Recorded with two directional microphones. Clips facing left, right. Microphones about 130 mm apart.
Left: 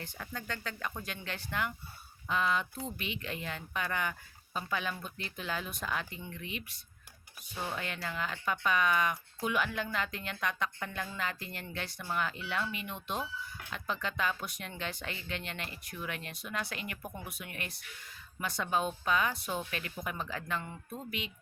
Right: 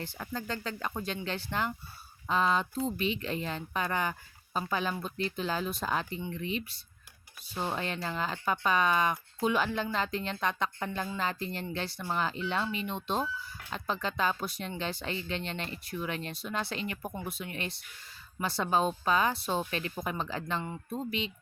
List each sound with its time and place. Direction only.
0.0 s speech: 30° right (ahead or behind)